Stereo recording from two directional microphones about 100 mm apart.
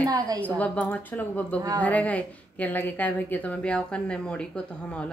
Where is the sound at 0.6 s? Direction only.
15° left (ahead or behind).